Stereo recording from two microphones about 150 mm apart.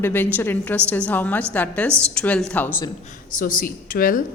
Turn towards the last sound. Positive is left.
turn(degrees=70)  # may be behind; listen again after turning